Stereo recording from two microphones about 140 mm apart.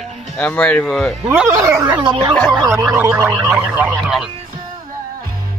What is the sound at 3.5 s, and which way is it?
Speech, 10° right (ahead or behind).